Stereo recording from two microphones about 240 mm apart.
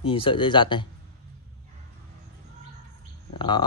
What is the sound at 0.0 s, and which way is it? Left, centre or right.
Speech, left.